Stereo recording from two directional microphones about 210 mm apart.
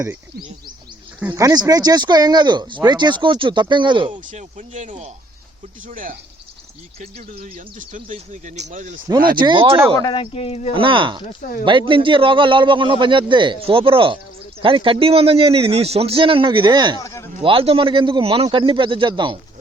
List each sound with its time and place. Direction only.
1.3 s speech: 15° right (ahead or behind)
4.1 s speech: 35° right (ahead or behind)
9.4 s speech: 25° right (ahead or behind)
10.0 s speech: 25° left (ahead or behind)
10.8 s speech: 25° right (ahead or behind)
17.0 s speech: 15° left (ahead or behind)
17.4 s speech: 25° right (ahead or behind)